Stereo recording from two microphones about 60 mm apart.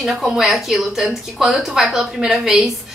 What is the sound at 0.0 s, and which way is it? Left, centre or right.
A woman's voice, centre.